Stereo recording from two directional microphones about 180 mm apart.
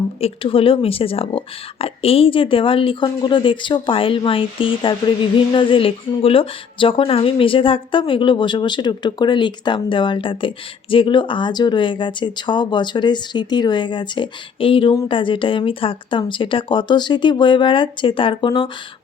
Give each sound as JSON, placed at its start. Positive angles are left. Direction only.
{"t": 0.2, "sound": "speech", "side_deg": 35}